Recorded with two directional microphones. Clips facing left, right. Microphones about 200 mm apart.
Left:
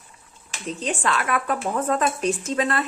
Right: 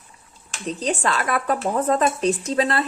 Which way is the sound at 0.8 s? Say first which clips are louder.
Right 2 dB; 35° right (ahead or behind).